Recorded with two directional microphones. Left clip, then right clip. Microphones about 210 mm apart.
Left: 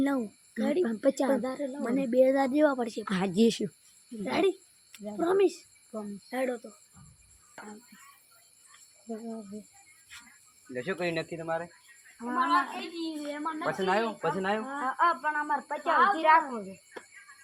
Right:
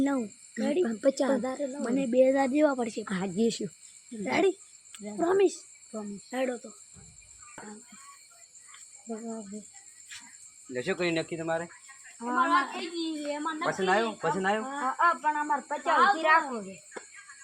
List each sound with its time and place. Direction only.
0.0 s speech: centre (ahead or behind)
0.9 s speech: 15° left (ahead or behind)
1.9 s speech: centre (ahead or behind)
3.0 s speech: 30° left (ahead or behind)
4.2 s speech: 15° right (ahead or behind)
10.7 s speech: 50° right (ahead or behind)
12.2 s speech: 15° left (ahead or behind)
13.8 s speech: 15° right (ahead or behind)
14.8 s speech: 10° left (ahead or behind)